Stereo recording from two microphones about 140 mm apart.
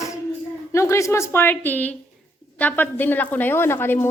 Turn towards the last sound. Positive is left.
turn(degrees=15)  # may be behind; listen again after turning